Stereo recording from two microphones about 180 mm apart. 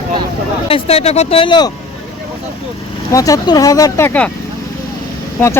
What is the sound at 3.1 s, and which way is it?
Speech, 20° left (ahead or behind).